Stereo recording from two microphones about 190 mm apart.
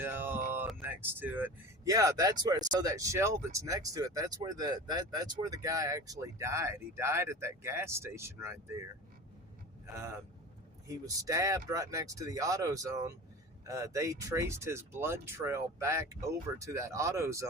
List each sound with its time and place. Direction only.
0.0 s a sound: 10° right (ahead or behind)
0.8 s speech: 10° right (ahead or behind)
10.8 s speech: 20° right (ahead or behind)